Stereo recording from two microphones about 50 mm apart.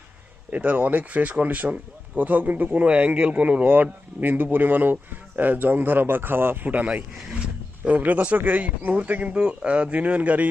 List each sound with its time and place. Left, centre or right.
0.5 s speech: right
4.2 s speech: right
6.7 s speech: right
7.1 s speech: centre
7.9 s speech: right